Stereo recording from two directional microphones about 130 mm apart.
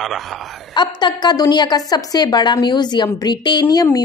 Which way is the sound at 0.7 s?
35° left (ahead or behind).